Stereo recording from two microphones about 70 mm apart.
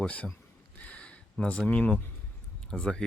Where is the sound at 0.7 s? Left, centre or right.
Centre.